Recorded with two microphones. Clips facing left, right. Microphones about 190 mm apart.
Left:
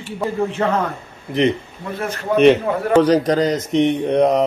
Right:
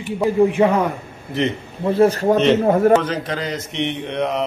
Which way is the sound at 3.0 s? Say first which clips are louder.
Left 8 dB; 40° left (ahead or behind).